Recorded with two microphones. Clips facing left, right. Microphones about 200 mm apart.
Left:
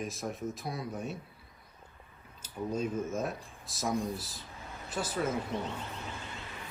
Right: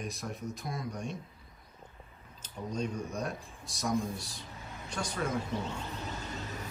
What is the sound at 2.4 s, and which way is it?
Speech, 5° left (ahead or behind).